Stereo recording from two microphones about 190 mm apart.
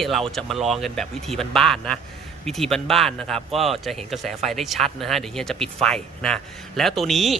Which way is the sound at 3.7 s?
Centre (ahead or behind).